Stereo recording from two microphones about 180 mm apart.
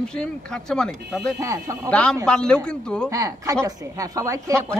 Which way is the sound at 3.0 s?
20° right (ahead or behind).